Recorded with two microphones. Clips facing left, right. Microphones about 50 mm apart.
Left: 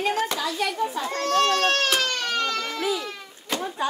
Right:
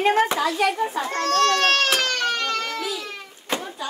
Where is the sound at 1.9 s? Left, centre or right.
Right.